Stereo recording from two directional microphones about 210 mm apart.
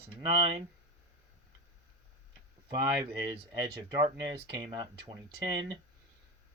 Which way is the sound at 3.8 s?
20° right (ahead or behind).